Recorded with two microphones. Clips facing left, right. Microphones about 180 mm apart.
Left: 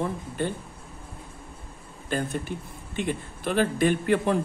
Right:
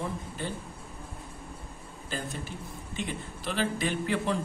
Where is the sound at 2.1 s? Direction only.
60° left (ahead or behind).